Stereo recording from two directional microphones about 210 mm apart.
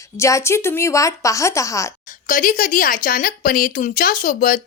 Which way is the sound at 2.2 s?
40° left (ahead or behind).